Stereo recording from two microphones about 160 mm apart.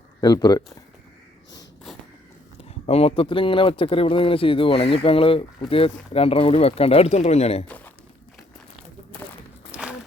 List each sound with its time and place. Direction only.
0.2 s speech: 25° left (ahead or behind)
2.6 s speech: 40° left (ahead or behind)
9.7 s walk: 5° right (ahead or behind)